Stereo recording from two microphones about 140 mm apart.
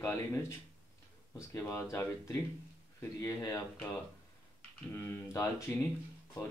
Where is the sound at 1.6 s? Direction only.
20° left (ahead or behind).